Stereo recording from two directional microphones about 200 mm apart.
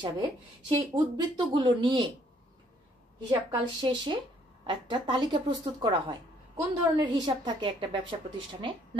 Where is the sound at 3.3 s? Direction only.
20° right (ahead or behind).